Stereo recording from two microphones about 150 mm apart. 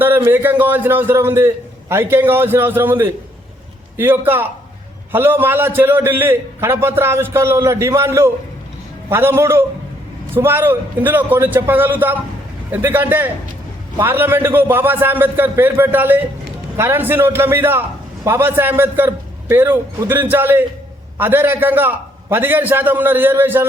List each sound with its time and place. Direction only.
0.0 s a man's voice: 15° right (ahead or behind)